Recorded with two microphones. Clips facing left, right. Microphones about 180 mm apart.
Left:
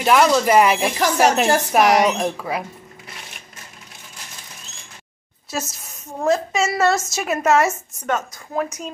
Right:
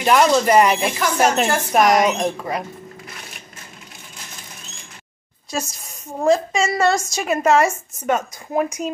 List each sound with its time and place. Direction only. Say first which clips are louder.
0.0 s a woman's voice: even; centre (ahead or behind)
5.5 s a woman's voice: right 1 dB; 5° left (ahead or behind)
8.1 s speech: right 3 dB; 10° right (ahead or behind)